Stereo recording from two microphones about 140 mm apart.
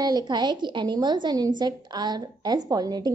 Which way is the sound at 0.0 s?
30° right (ahead or behind).